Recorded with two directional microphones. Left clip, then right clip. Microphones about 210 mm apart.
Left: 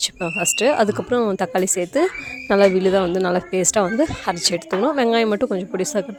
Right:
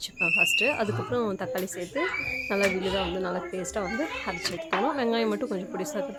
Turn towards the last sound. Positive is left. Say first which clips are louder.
# left 9 dB
turn(degrees=40)  # may be behind; listen again after turning